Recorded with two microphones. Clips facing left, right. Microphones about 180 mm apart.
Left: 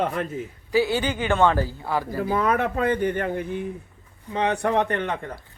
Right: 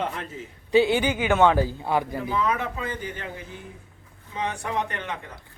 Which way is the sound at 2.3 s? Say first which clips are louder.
Left 5 dB; 55° left (ahead or behind).